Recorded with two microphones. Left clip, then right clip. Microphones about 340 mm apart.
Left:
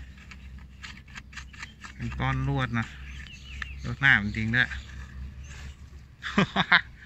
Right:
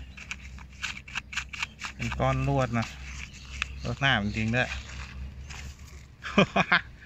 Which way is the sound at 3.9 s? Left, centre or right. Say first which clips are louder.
Left 5 dB; centre.